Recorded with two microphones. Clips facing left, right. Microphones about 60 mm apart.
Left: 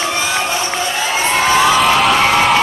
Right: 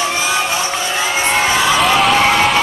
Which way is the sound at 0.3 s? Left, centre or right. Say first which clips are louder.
Right 1 dB; centre.